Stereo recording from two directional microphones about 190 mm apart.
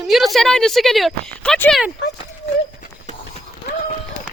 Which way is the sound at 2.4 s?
35° left (ahead or behind).